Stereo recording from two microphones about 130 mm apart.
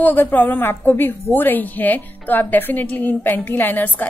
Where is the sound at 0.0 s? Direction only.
15° left (ahead or behind).